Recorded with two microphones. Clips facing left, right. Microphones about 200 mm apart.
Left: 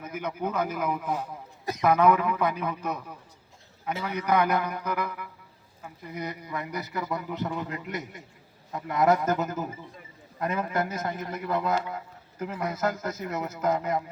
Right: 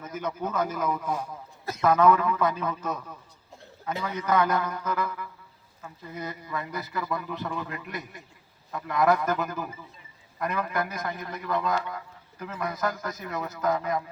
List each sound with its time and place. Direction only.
0.0 s a man's voice: 10° left (ahead or behind)